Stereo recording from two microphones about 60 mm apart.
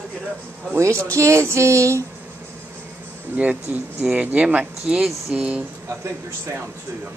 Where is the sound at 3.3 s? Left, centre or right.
Right.